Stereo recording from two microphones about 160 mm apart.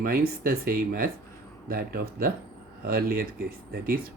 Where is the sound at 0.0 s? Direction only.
65° right (ahead or behind).